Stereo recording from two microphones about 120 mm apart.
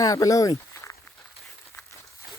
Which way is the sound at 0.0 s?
30° left (ahead or behind).